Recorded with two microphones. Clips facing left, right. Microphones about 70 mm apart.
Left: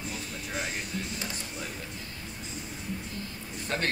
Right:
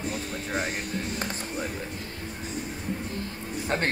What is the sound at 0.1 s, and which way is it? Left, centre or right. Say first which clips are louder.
Speech: right 5 dB; right.